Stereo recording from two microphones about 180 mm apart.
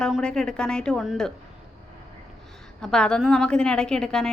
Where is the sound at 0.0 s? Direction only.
5° left (ahead or behind).